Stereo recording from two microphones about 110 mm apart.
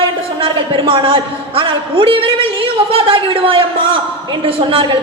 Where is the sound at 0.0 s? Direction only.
55° right (ahead or behind).